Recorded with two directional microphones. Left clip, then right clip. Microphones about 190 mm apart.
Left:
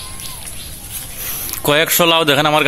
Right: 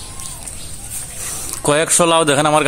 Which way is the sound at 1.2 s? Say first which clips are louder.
Even; 10° right (ahead or behind).